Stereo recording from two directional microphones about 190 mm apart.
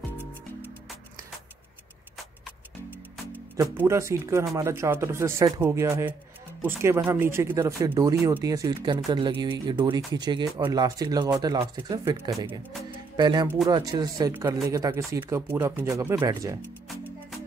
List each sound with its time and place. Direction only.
3.5 s speech: 15° right (ahead or behind)